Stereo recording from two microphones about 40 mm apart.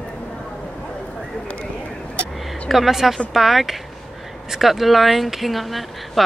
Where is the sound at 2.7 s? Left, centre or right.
Centre.